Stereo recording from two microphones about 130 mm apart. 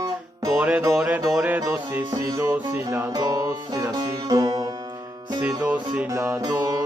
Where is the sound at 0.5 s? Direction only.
15° right (ahead or behind).